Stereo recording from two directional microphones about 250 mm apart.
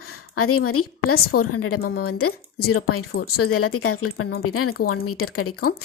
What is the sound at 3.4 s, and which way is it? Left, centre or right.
A woman's voice, left.